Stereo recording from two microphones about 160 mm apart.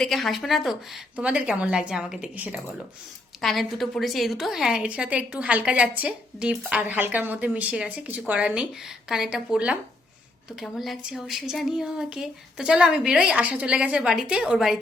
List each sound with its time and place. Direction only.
0.0 s a woman's voice: centre (ahead or behind)